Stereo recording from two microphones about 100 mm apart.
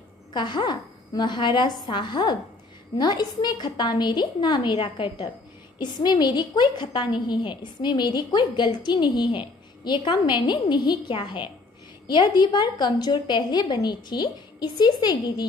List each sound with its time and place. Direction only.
0.3 s a woman's voice: 50° left (ahead or behind)